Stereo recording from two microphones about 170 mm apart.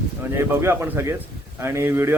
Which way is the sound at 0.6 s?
15° right (ahead or behind).